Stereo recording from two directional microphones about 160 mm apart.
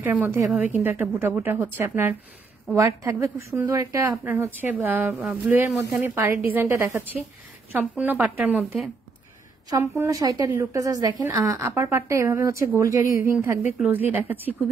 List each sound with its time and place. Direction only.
0.0 s speech: 10° right (ahead or behind)
9.7 s a woman's voice: 20° right (ahead or behind)